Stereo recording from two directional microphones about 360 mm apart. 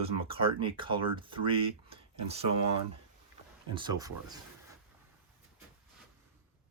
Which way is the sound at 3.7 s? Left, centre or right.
Centre.